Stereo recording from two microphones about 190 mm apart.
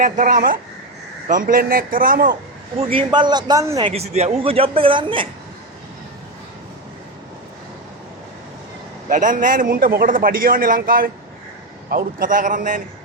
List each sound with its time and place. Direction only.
0.0 s a man's voice: 45° right (ahead or behind)
2.9 s a man's voice: 25° right (ahead or behind)
9.0 s a man's voice: 45° right (ahead or behind)